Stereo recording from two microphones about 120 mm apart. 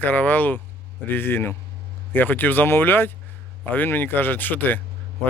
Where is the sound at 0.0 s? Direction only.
15° left (ahead or behind).